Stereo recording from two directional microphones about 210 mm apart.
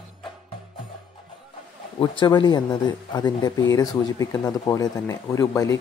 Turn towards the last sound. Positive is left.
turn(degrees=15)  # may be behind; listen again after turning